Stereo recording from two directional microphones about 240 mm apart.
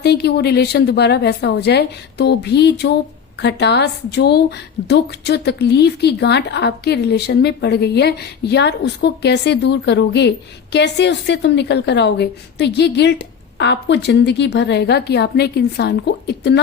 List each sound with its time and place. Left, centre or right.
0.0 s a woman's voice: left